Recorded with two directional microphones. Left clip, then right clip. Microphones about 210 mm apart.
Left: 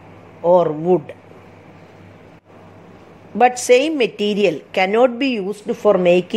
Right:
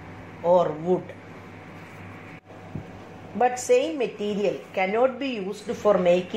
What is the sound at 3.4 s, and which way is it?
A woman's voice, 50° left (ahead or behind).